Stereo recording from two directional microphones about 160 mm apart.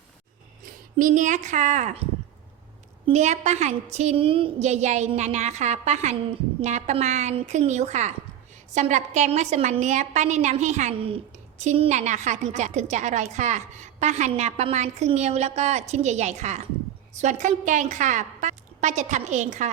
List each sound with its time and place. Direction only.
0.9 s a woman's voice: 55° right (ahead or behind)
3.1 s a woman's voice: 45° right (ahead or behind)